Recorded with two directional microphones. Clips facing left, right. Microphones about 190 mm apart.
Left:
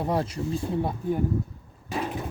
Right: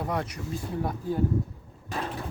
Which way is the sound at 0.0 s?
30° left (ahead or behind).